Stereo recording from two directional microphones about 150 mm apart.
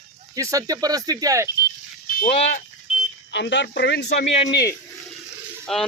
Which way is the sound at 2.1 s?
65° left (ahead or behind).